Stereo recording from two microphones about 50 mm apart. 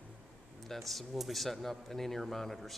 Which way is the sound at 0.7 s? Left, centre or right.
Centre.